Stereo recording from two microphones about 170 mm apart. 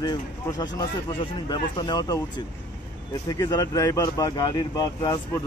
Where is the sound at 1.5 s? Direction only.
25° left (ahead or behind).